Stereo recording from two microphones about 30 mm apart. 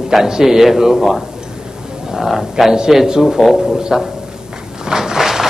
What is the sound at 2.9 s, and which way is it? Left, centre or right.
A man's voice, centre.